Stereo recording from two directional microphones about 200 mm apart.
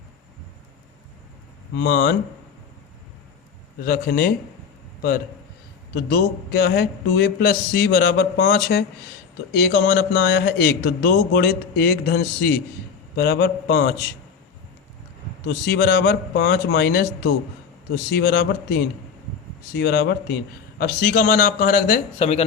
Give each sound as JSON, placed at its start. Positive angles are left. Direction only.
{"t": 1.7, "sound": "a man's voice", "side_deg": 50}
{"t": 3.8, "sound": "a man's voice", "side_deg": 50}
{"t": 5.9, "sound": "a man's voice", "side_deg": 50}
{"t": 15.4, "sound": "a man's voice", "side_deg": 50}
{"t": 22.2, "sound": "speech", "side_deg": 30}